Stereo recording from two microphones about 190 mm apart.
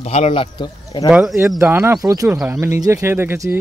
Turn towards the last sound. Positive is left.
turn(degrees=-10)  # may be behind; listen again after turning